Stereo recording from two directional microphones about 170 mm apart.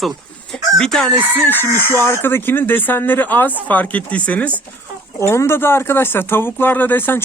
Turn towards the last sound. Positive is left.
turn(degrees=10)  # may be behind; listen again after turning